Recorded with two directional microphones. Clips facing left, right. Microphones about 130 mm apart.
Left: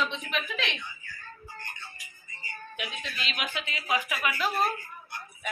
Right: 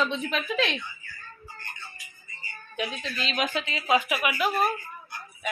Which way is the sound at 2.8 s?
35° right (ahead or behind).